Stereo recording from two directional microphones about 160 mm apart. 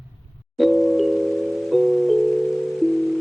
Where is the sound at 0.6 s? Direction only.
Centre (ahead or behind).